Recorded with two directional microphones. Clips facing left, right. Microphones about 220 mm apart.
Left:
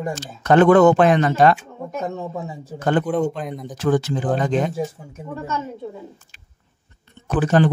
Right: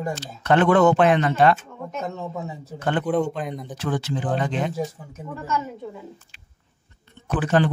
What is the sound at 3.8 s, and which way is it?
Speech, 45° left (ahead or behind).